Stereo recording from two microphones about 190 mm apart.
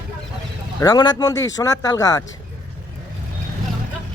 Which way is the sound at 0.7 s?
20° left (ahead or behind).